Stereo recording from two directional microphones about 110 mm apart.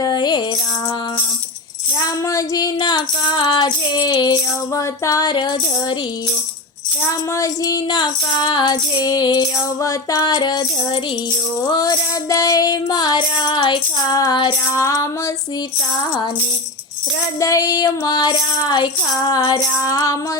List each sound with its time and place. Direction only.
0.0 s music: 40° left (ahead or behind)
2.2 s music: 30° left (ahead or behind)
5.3 s music: 40° left (ahead or behind)
7.3 s child singing: 30° left (ahead or behind)
9.8 s music: 30° left (ahead or behind)
10.3 s child singing: 40° left (ahead or behind)
11.6 s child singing: 40° left (ahead or behind)
14.8 s music: 30° left (ahead or behind)
17.4 s child singing: 30° left (ahead or behind)